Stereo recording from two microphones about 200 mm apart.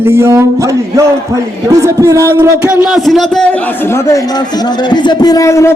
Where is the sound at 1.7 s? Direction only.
15° right (ahead or behind); by 3.5 s centre (ahead or behind).